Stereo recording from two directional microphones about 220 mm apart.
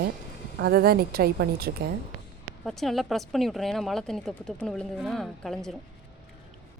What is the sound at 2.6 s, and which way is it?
Speech, centre (ahead or behind).